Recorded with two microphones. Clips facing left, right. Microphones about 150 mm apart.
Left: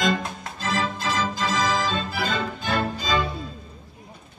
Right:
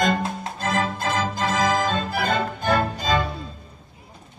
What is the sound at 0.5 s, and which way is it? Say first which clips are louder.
Music: right 1 dB; 50° right (ahead or behind).